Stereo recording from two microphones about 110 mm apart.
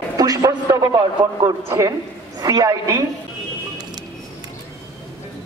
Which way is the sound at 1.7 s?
30° right (ahead or behind).